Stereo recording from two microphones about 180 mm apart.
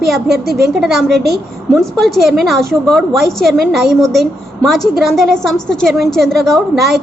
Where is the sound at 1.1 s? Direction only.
65° right (ahead or behind).